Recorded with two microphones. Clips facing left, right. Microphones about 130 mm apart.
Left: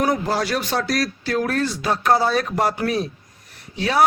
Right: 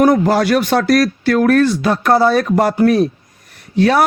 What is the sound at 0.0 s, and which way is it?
A man's voice, 60° right (ahead or behind).